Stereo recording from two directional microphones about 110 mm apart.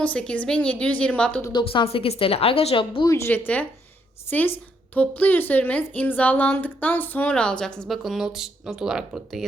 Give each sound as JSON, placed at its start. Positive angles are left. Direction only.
{"t": 0.0, "sound": "a woman's voice", "side_deg": 10}
{"t": 1.5, "sound": "a woman's voice", "side_deg": 55}
{"t": 3.1, "sound": "a woman's voice", "side_deg": 20}